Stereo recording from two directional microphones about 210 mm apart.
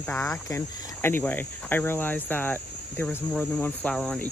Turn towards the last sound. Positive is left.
turn(degrees=0)  # may be behind; listen again after turning